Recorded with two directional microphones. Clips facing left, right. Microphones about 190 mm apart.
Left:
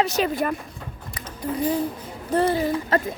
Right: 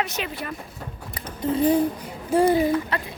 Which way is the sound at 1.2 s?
25° right (ahead or behind).